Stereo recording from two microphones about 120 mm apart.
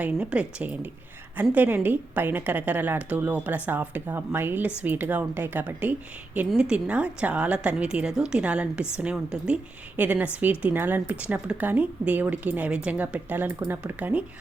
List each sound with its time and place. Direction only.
0.0 s a woman's voice: 10° right (ahead or behind)